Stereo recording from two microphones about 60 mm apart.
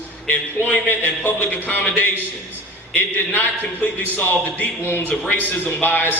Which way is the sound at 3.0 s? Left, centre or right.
Left.